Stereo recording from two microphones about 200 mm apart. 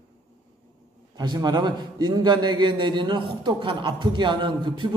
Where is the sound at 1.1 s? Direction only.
20° right (ahead or behind).